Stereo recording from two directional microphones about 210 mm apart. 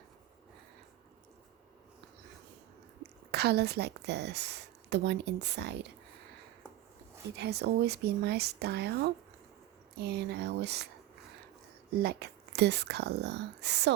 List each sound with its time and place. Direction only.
3.0 s a woman's voice: 50° right (ahead or behind)
7.3 s speech: 50° right (ahead or behind)
11.9 s speech: 50° right (ahead or behind)